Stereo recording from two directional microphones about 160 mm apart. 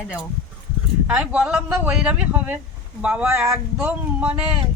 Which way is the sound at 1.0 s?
10° right (ahead or behind).